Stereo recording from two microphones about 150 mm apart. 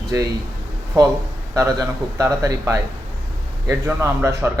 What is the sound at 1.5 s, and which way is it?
A man's voice, 20° right (ahead or behind).